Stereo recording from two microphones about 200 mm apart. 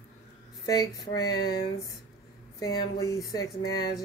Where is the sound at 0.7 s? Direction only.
20° left (ahead or behind).